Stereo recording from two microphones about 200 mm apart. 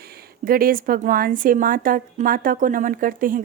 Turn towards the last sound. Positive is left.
turn(degrees=-45)  # may be behind; listen again after turning